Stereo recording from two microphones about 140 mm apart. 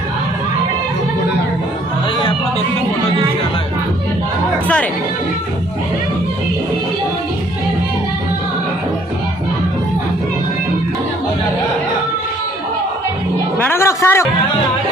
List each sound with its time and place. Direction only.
13.7 s a man's voice: 20° left (ahead or behind)